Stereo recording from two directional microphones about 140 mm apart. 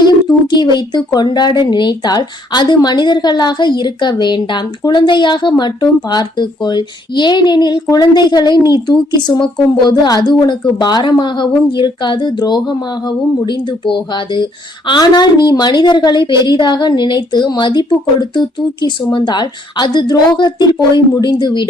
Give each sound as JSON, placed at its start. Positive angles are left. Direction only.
{"t": 0.4, "sound": "a woman's voice", "side_deg": 30}